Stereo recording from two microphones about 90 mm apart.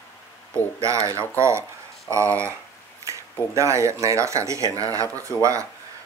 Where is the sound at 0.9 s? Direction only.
35° right (ahead or behind).